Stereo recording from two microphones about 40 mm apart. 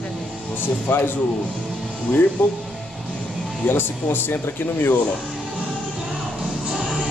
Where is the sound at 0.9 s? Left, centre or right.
Left.